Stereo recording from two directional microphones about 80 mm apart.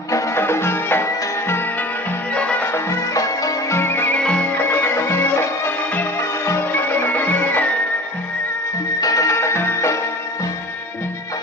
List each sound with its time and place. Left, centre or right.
0.1 s music: left
2.3 s music: centre
3.2 s music: left
4.2 s music: centre
9.0 s music: left